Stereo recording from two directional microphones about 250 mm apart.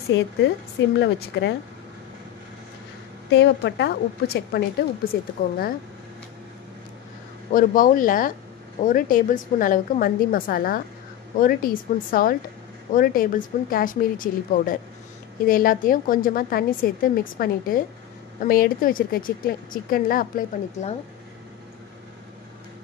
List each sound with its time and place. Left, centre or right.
0.1 s a woman's voice: left
3.3 s a woman's voice: left
7.5 s a woman's voice: left